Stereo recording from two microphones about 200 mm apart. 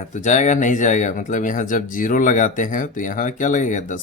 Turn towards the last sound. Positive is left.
turn(degrees=40)  # may be behind; listen again after turning